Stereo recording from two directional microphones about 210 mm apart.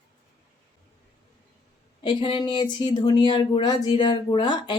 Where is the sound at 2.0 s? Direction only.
20° left (ahead or behind).